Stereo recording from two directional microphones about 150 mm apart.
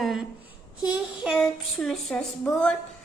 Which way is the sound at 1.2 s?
Centre (ahead or behind).